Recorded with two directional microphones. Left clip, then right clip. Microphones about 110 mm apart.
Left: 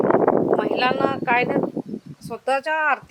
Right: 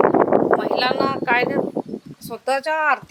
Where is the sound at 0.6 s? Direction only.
15° right (ahead or behind).